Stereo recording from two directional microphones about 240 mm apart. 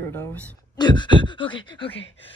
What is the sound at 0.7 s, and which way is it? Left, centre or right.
Speech, centre.